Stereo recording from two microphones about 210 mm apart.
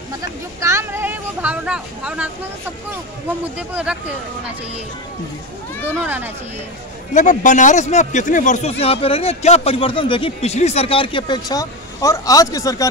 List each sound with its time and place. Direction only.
0.2 s speech: 15° right (ahead or behind)
3.5 s speech: 5° right (ahead or behind)
6.0 s speech: 10° right (ahead or behind)
7.2 s speech: 35° left (ahead or behind); by 12.8 s 15° left (ahead or behind)